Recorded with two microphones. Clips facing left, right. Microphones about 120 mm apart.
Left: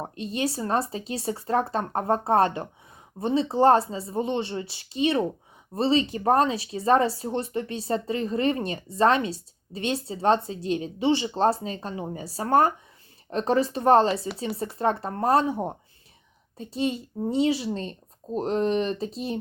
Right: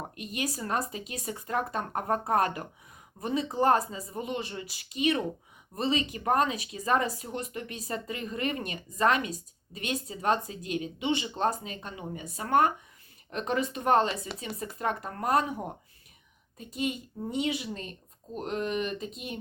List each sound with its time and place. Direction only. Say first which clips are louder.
0.0 s speech: left 6 dB; 30° left (ahead or behind)